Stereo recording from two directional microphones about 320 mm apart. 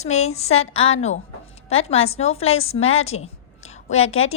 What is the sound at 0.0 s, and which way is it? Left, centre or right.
A woman's voice, left.